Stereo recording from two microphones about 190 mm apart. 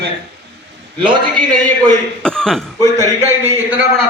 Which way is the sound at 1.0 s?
25° right (ahead or behind).